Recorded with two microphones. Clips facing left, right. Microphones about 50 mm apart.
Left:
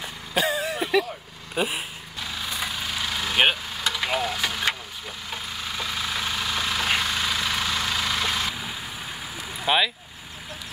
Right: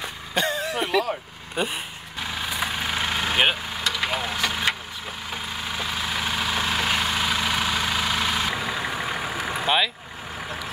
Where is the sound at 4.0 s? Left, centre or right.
Centre.